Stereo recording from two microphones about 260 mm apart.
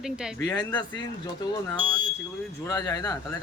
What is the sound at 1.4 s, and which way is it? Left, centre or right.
Speech, centre.